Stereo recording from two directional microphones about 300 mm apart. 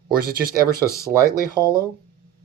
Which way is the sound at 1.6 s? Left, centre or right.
Centre.